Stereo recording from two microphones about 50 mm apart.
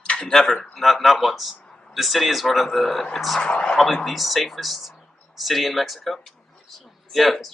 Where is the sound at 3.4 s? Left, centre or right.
Left.